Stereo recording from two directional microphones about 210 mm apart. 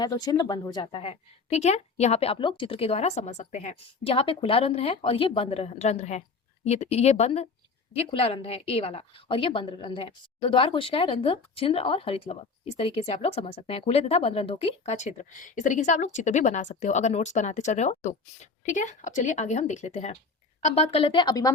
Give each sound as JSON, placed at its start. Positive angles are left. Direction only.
{"t": 0.0, "sound": "a woman's voice", "side_deg": 20}